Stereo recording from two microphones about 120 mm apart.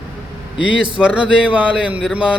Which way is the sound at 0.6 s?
10° right (ahead or behind).